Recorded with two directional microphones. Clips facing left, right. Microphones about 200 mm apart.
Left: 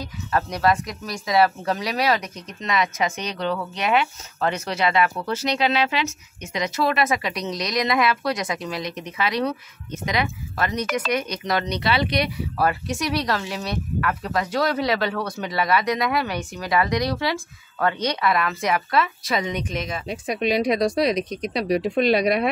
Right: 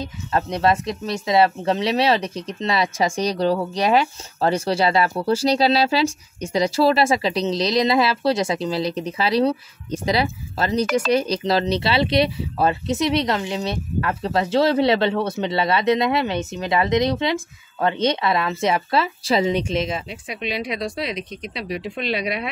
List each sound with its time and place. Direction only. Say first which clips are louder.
0.0 s speech: right 1 dB; 25° right (ahead or behind)
20.1 s speech: left 6 dB; 45° left (ahead or behind)